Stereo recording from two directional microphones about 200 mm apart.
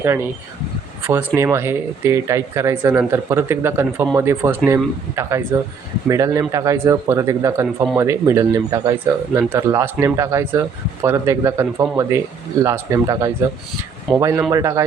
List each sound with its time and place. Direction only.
0.0 s speech: 10° right (ahead or behind)